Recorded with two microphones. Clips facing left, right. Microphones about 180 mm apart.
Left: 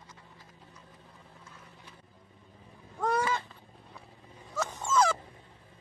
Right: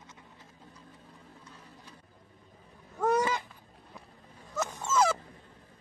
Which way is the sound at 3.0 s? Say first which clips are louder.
Right 2 dB; 15° right (ahead or behind).